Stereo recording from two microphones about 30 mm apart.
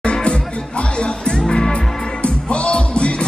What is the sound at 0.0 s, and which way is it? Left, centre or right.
Music, left.